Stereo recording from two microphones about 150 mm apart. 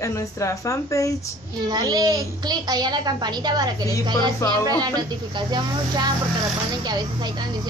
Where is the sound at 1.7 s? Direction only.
25° right (ahead or behind).